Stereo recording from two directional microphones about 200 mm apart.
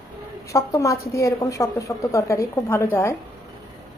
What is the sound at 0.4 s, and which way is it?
A woman's voice, 15° left (ahead or behind).